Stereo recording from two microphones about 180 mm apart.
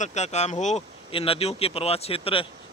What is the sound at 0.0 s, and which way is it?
Speech, 40° left (ahead or behind).